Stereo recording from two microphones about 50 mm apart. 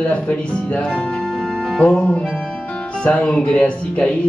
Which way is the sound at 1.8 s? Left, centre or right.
Centre.